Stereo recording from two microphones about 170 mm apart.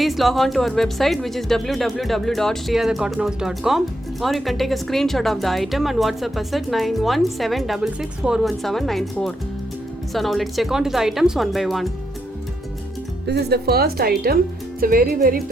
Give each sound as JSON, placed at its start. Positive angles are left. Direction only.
{"t": 0.0, "sound": "speech", "side_deg": 0}
{"t": 13.2, "sound": "a woman's voice", "side_deg": -75}